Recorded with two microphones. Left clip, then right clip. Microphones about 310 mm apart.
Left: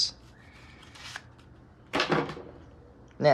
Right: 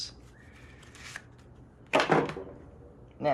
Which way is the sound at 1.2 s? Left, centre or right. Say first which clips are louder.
Left 1 dB; centre.